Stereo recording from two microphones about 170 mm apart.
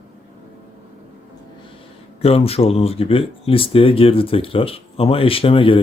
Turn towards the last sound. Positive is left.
turn(degrees=30)  # may be behind; listen again after turning